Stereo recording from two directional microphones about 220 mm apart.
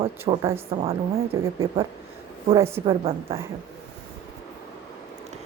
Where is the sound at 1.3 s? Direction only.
15° right (ahead or behind).